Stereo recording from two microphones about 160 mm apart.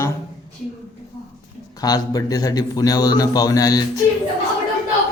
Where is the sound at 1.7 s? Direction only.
25° left (ahead or behind).